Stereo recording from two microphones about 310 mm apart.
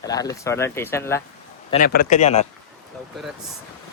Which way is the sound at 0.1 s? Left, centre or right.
Centre.